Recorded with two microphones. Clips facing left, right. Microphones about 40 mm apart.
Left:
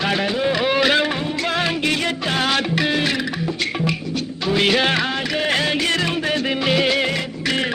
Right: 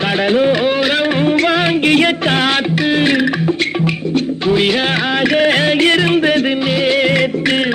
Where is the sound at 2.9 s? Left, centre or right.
Right.